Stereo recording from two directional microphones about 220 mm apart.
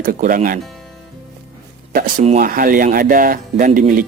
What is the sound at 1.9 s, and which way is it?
Speech, 35° right (ahead or behind).